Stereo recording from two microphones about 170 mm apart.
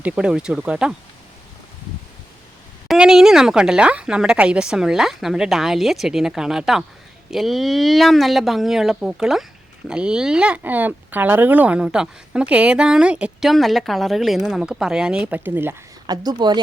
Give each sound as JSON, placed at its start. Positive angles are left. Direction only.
{"t": 0.0, "sound": "speech", "side_deg": -5}
{"t": 2.8, "sound": "speech", "side_deg": -5}
{"t": 16.0, "sound": "speech", "side_deg": -25}